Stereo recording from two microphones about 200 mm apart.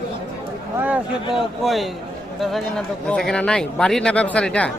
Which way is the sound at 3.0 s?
5° left (ahead or behind).